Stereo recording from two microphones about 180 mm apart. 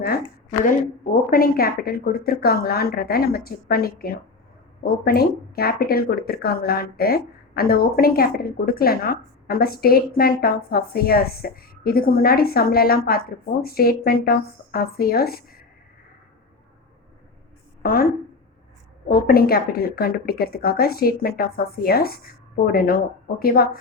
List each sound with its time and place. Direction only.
1.3 s speech: 55° left (ahead or behind)
17.8 s speech: 55° left (ahead or behind)